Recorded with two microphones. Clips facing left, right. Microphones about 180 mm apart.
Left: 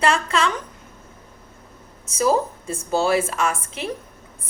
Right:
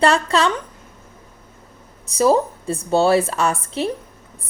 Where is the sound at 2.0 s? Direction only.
35° right (ahead or behind).